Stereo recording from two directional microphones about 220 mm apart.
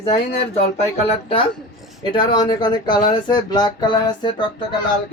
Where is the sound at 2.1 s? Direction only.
20° left (ahead or behind).